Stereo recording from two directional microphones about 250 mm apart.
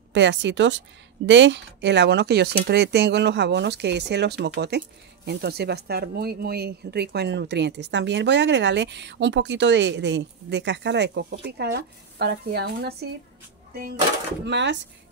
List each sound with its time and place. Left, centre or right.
0.1 s a woman's voice: right
14.4 s a woman's voice: right